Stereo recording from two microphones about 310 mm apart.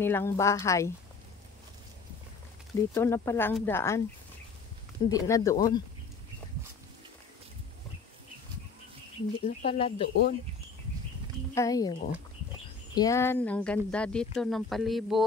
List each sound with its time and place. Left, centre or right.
0.0 s speech: centre
2.9 s speech: centre
5.1 s speech: centre
9.4 s speech: centre
10.0 s speech: left
11.5 s speech: centre